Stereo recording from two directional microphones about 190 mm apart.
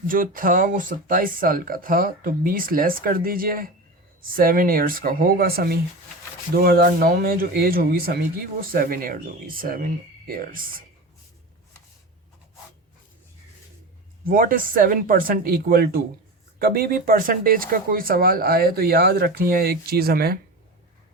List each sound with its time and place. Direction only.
0.1 s speech: 45° right (ahead or behind)
14.3 s speech: 50° right (ahead or behind)